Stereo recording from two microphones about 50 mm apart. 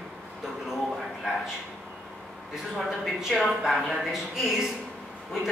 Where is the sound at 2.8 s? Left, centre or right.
Centre.